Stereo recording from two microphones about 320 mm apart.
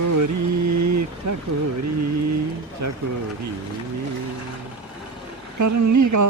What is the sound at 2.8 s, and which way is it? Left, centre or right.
Speech, right.